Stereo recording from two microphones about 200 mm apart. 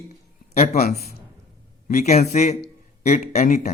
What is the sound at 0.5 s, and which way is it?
A man's voice, 35° left (ahead or behind).